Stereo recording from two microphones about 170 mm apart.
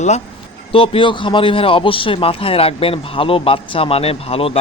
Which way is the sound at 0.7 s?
30° left (ahead or behind).